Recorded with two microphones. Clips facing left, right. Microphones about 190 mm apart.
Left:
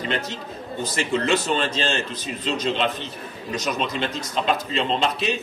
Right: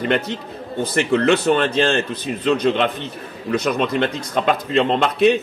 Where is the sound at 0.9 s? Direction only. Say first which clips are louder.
Right 6 dB; 60° right (ahead or behind).